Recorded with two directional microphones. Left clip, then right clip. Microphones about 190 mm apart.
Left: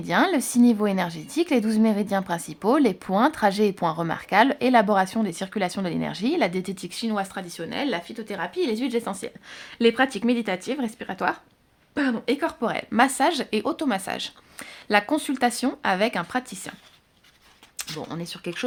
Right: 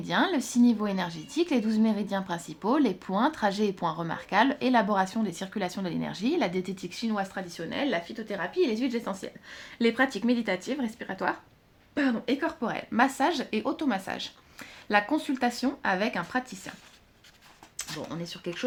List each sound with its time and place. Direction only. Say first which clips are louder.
0.0 s a woman's voice: left 5 dB; 35° left (ahead or behind)
17.7 s speech: left 3 dB; 60° left (ahead or behind)